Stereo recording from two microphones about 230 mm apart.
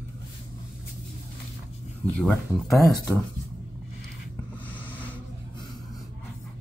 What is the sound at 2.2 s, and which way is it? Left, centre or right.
Speech, centre.